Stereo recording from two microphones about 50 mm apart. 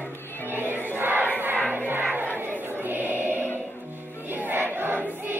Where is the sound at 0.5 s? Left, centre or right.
Right.